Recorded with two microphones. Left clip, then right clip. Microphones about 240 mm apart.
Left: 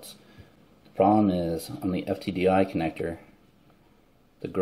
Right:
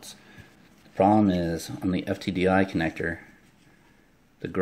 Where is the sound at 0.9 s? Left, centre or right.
Centre.